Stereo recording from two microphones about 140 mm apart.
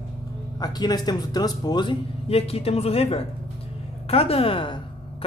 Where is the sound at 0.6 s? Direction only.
30° left (ahead or behind).